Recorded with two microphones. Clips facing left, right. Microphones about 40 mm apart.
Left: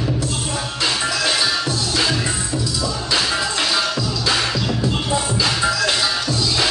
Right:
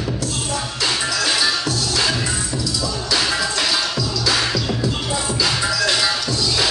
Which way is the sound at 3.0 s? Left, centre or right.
Left.